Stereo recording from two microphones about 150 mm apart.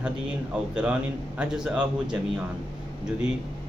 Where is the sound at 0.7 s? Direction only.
5° right (ahead or behind).